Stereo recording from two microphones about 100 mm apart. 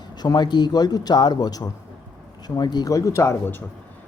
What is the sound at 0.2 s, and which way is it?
A man's voice, 45° left (ahead or behind).